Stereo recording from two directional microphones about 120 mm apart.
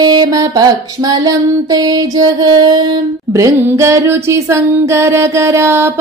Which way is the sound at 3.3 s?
25° right (ahead or behind).